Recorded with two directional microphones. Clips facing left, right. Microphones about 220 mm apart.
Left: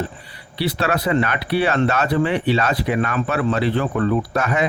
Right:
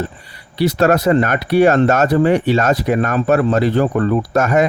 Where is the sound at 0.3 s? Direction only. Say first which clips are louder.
Right 10 dB; 45° right (ahead or behind).